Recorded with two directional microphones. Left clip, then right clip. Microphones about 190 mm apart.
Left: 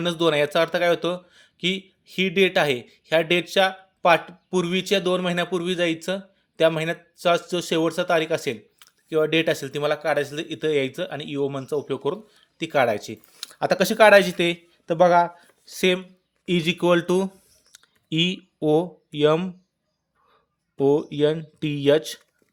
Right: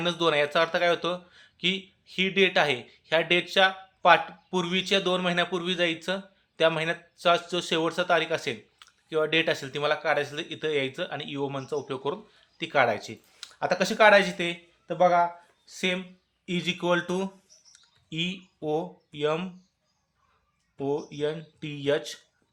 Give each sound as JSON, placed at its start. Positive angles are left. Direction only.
{"t": 0.0, "sound": "speech", "side_deg": 45}
{"t": 20.7, "sound": "speech", "side_deg": 50}